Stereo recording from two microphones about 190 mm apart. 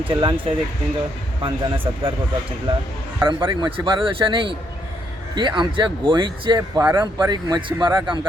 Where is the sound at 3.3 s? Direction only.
25° right (ahead or behind).